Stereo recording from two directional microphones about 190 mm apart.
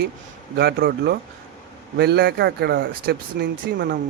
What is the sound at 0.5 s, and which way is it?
Speech, 55° right (ahead or behind).